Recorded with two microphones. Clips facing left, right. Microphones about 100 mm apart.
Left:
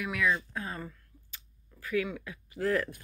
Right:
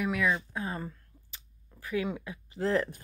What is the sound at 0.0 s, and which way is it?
Speech, 25° right (ahead or behind).